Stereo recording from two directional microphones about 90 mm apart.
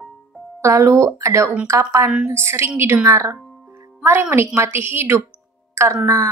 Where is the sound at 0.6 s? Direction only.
30° right (ahead or behind).